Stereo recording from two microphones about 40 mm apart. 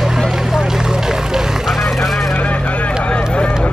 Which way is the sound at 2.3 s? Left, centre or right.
Left.